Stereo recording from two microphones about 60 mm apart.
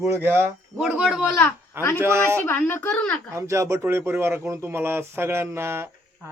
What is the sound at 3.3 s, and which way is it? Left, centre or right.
Speech, right.